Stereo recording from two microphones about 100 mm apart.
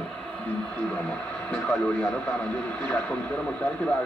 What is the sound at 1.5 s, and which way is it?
Speech, 10° left (ahead or behind).